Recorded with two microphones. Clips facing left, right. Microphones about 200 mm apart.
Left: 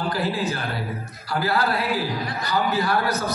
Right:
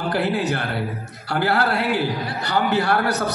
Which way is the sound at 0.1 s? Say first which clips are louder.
Right 3 dB; 75° right (ahead or behind).